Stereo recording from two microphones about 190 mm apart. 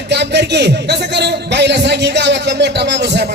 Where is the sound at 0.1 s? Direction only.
60° right (ahead or behind).